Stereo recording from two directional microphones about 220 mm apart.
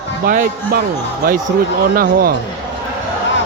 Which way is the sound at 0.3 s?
40° right (ahead or behind).